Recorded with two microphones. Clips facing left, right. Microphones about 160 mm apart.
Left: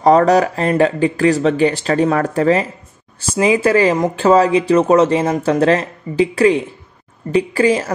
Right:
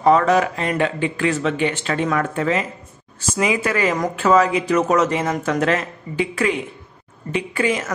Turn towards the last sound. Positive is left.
turn(degrees=35)  # may be behind; listen again after turning